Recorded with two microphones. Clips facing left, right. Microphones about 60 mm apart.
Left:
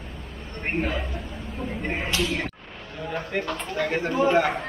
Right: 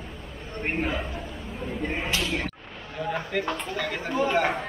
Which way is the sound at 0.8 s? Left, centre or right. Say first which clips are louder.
Left 1 dB; centre.